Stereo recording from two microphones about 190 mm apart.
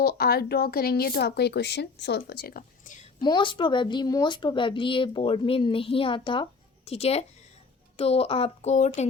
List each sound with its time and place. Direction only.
0.0 s speech: 55° left (ahead or behind)
3.2 s a woman's voice: 25° left (ahead or behind)